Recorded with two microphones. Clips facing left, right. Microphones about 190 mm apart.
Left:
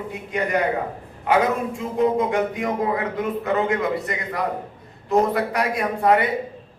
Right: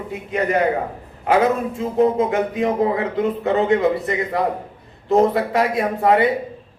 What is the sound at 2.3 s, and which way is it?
A man's voice, 25° right (ahead or behind).